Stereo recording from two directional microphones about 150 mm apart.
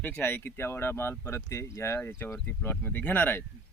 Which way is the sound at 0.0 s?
10° left (ahead or behind).